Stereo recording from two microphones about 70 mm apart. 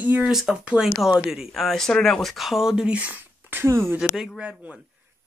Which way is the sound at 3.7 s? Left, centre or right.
Right.